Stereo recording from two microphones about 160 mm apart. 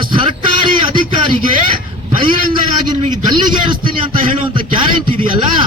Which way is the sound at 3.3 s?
30° right (ahead or behind).